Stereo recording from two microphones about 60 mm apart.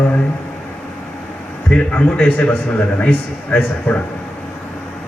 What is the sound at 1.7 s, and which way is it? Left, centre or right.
Speech, centre.